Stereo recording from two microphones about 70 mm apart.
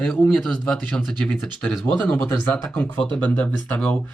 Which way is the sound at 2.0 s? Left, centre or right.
Left.